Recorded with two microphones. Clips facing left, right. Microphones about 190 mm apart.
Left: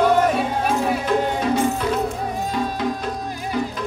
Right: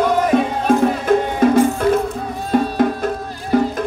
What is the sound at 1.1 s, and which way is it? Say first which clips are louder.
Music: right 7 dB; 50° right (ahead or behind).